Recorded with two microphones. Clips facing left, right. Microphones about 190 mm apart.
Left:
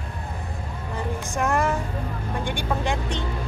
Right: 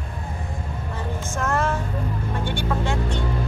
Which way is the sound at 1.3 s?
15° left (ahead or behind).